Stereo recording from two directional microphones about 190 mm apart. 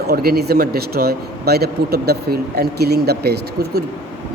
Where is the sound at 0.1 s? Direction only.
55° right (ahead or behind).